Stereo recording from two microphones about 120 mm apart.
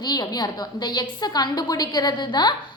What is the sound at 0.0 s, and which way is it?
A woman's voice, 30° left (ahead or behind).